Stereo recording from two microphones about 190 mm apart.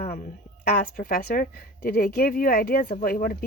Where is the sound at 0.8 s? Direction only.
50° left (ahead or behind).